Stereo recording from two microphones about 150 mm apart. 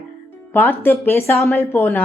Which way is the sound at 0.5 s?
15° left (ahead or behind).